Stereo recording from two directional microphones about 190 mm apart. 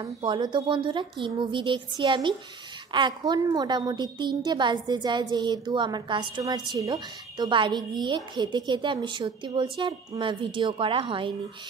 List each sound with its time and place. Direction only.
0.0 s a woman's voice: 25° right (ahead or behind)